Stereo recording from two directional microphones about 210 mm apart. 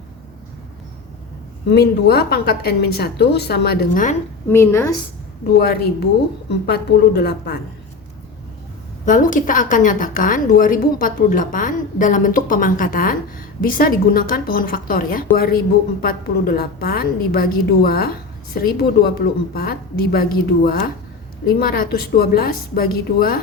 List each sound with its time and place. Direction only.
1.7 s a woman's voice: 50° left (ahead or behind)
4.4 s a woman's voice: 10° left (ahead or behind)
5.5 s a woman's voice: 45° left (ahead or behind)
9.0 s a woman's voice: 40° left (ahead or behind)